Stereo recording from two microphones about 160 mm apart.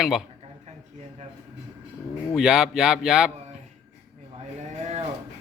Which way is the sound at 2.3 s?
5° right (ahead or behind).